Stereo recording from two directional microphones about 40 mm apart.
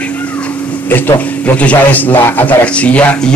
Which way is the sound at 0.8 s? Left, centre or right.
Left.